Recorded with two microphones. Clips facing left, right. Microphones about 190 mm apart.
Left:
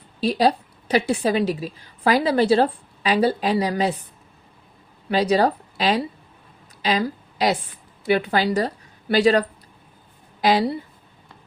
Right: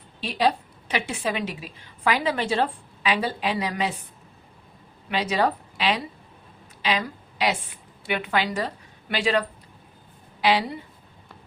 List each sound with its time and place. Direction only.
0.2 s a woman's voice: 40° left (ahead or behind)
5.0 s a woman's voice: 35° left (ahead or behind)
10.4 s a woman's voice: 40° left (ahead or behind)